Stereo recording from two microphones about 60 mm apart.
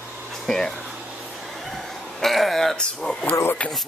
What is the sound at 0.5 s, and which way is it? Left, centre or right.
Speech, centre.